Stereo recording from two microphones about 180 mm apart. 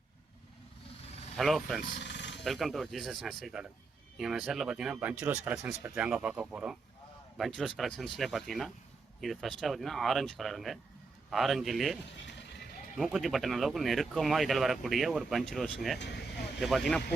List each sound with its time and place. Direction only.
1.4 s speech: centre (ahead or behind)
2.0 s sheep: 75° left (ahead or behind)
2.4 s speech: centre (ahead or behind)
12.2 s music: 75° left (ahead or behind)
13.0 s speech: centre (ahead or behind)
16.0 s vehicle: 70° left (ahead or behind)
16.6 s speech: centre (ahead or behind)